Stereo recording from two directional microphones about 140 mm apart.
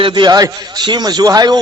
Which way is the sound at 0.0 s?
30° right (ahead or behind).